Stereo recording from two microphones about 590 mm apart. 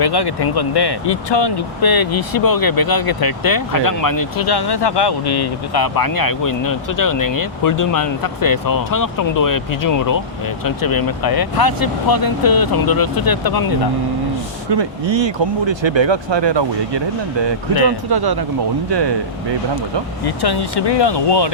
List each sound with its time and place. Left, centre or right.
0.0 s speech: left
14.7 s speech: right
18.1 s speech: right
20.2 s speech: left